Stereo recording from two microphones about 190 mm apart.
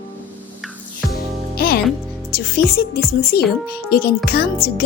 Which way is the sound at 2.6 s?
55° left (ahead or behind).